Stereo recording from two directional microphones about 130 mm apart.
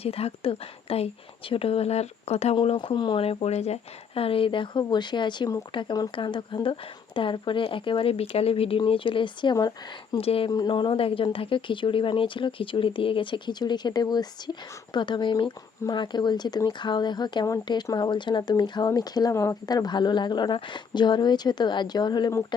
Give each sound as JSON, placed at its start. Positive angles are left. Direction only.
{"t": 0.0, "sound": "speech", "side_deg": 50}
{"t": 2.7, "sound": "speech", "side_deg": 35}
{"t": 3.2, "sound": "speech", "side_deg": 55}
{"t": 10.2, "sound": "speech", "side_deg": 45}
{"t": 10.5, "sound": "speech", "side_deg": 35}